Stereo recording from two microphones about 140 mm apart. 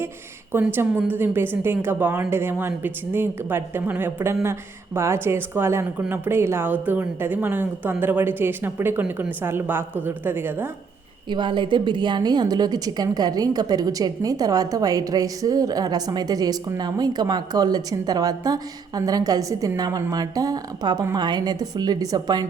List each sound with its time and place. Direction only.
0.6 s speech: 15° right (ahead or behind)
11.3 s a woman's voice: 35° right (ahead or behind)